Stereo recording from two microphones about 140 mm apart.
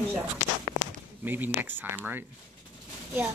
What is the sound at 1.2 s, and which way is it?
Speech, 10° right (ahead or behind).